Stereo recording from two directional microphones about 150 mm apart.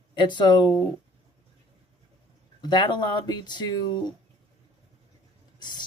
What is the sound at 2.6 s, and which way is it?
Speech, 30° left (ahead or behind).